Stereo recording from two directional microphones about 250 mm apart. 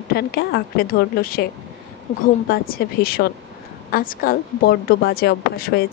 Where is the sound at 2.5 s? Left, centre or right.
Left.